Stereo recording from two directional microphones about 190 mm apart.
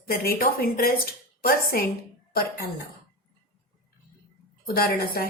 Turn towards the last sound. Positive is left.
turn(degrees=55)  # may be behind; listen again after turning